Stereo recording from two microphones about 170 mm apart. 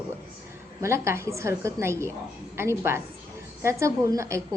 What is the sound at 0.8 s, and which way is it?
A woman's voice, 15° right (ahead or behind).